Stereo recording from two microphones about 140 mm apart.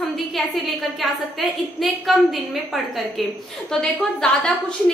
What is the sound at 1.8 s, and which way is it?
A woman's voice, centre (ahead or behind).